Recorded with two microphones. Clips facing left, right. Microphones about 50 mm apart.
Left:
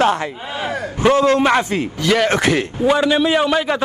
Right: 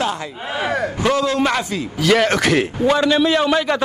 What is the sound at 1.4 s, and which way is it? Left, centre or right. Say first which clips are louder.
Speech: left 3 dB; left.